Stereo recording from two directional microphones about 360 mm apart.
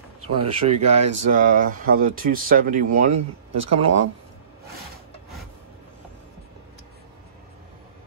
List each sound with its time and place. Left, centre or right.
0.4 s speech: centre
2.9 s speech: right